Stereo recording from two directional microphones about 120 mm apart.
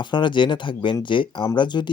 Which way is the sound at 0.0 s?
40° left (ahead or behind).